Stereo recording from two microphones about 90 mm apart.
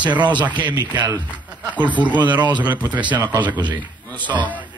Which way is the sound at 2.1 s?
55° right (ahead or behind).